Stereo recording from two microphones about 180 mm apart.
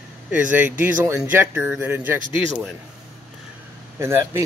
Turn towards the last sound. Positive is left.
turn(degrees=-15)  # may be behind; listen again after turning